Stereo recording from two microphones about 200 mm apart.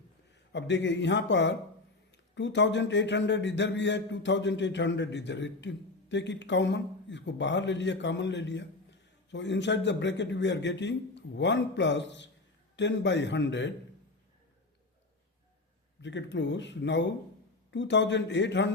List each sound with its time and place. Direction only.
0.5 s a man's voice: 60° left (ahead or behind)
16.0 s a man's voice: 60° left (ahead or behind)